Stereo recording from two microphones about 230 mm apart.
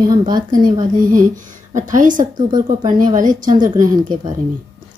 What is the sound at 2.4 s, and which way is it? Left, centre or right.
Speech, centre.